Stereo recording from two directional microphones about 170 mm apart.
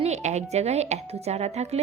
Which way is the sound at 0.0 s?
40° right (ahead or behind).